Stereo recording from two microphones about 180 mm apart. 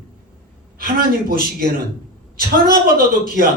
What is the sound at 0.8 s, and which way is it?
Speech, 55° right (ahead or behind).